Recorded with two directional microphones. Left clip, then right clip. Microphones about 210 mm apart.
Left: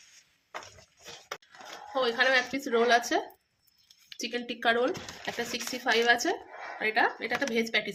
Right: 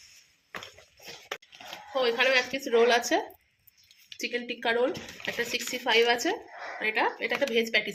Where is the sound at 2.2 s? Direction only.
30° left (ahead or behind).